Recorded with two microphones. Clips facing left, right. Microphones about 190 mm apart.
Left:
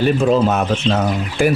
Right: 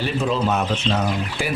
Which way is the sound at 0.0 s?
50° left (ahead or behind).